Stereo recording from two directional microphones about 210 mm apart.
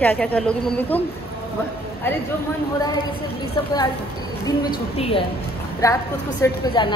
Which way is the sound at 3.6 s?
20° left (ahead or behind).